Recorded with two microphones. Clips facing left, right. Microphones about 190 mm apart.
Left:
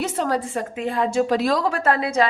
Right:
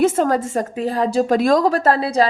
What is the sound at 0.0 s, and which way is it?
A woman's voice, 45° right (ahead or behind).